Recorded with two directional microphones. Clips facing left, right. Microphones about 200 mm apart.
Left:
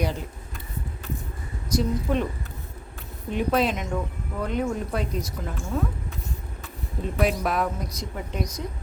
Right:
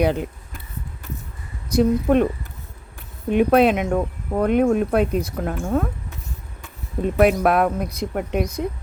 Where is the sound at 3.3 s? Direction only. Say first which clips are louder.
Right 8 dB; 60° right (ahead or behind).